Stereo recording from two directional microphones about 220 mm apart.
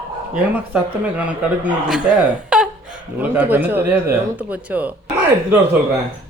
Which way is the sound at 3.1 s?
10° right (ahead or behind).